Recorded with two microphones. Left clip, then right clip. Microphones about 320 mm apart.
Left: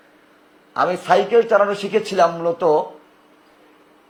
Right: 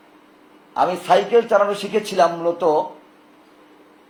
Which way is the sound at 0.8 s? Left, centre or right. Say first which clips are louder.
Even; left.